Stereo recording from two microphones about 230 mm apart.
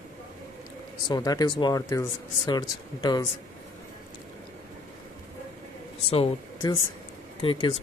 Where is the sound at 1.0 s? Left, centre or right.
Centre.